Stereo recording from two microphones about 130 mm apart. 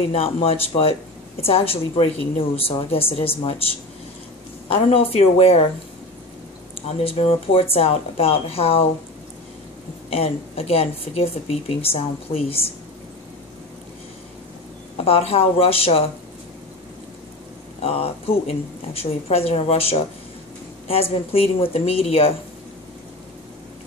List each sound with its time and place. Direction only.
0.1 s speech: 50° left (ahead or behind)
4.8 s speech: 50° left (ahead or behind)
6.9 s speech: 50° left (ahead or behind)
10.0 s speech: 50° left (ahead or behind)
15.0 s speech: 45° left (ahead or behind)
17.8 s speech: 50° left (ahead or behind)